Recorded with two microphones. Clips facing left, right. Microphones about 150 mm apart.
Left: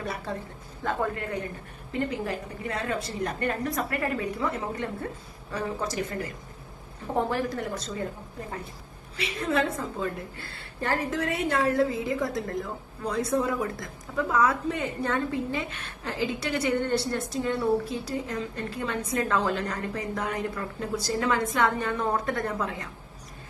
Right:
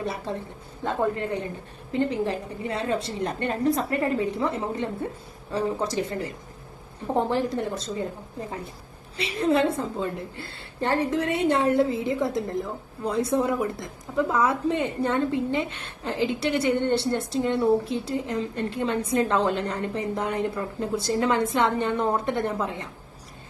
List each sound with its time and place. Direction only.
0.3 s a woman's voice: 25° right (ahead or behind)
9.1 s a woman's voice: 30° right (ahead or behind)